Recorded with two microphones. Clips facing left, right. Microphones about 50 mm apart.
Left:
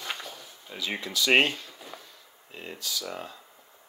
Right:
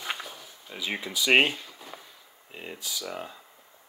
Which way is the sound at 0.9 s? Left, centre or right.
Centre.